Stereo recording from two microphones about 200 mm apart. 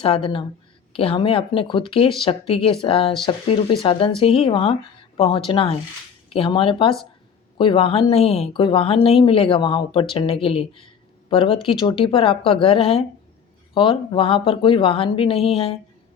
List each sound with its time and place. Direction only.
0.0 s speech: 30° left (ahead or behind)
4.2 s speech: 30° left (ahead or behind)